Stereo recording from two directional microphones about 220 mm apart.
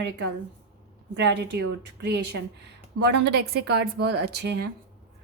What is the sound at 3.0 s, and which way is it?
A woman's voice, 50° right (ahead or behind).